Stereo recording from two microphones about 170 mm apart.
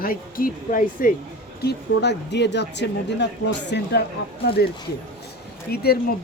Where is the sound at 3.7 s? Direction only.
80° left.